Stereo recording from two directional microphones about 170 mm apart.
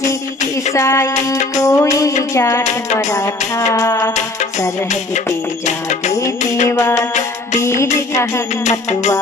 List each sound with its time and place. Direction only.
0.0 s tambourine: 45° left (ahead or behind)
0.7 s music: 15° left (ahead or behind)
4.1 s music: 45° left (ahead or behind)
5.7 s music: 45° left (ahead or behind)
6.7 s music: 20° left (ahead or behind)